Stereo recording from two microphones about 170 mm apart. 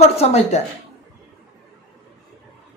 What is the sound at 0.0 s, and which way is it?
Speech, 40° left (ahead or behind).